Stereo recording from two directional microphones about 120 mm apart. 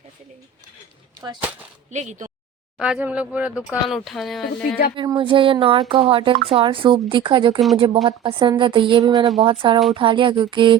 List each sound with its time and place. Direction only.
1.9 s speech: 80° right
2.7 s speech: 5° right (ahead or behind)
5.0 s speech: 45° right (ahead or behind)